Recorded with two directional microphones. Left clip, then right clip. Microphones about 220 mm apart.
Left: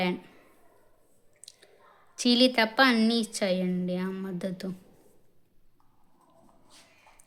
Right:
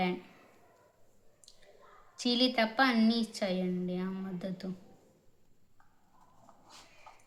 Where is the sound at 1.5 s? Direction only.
45° left (ahead or behind).